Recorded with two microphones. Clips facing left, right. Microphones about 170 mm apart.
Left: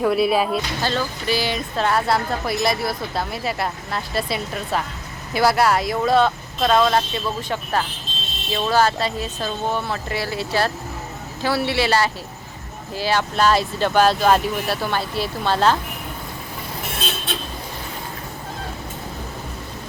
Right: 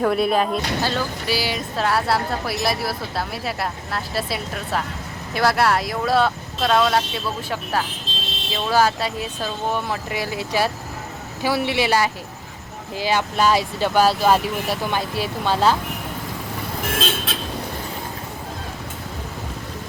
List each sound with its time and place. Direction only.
0.0 s speech: centre (ahead or behind)
0.8 s speech: 5° right (ahead or behind)
16.8 s vehicle: 90° right